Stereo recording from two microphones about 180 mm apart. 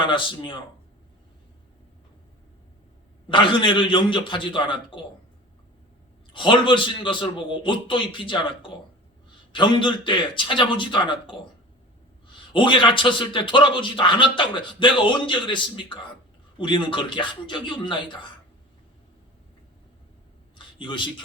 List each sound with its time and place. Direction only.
0.0 s speech: 25° left (ahead or behind)
3.2 s speech: 25° left (ahead or behind)
6.3 s speech: 25° left (ahead or behind)
12.5 s speech: 25° left (ahead or behind)
20.6 s a sound: 25° left (ahead or behind)